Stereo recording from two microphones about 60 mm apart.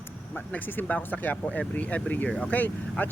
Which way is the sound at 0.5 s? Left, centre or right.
Left.